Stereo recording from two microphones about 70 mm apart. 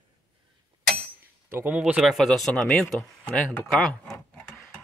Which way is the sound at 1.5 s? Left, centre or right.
Right.